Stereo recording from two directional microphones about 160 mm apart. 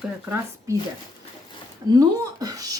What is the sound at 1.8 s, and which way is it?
Speech, 25° right (ahead or behind).